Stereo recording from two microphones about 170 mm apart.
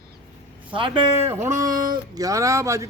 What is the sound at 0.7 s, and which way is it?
Speech, 30° right (ahead or behind).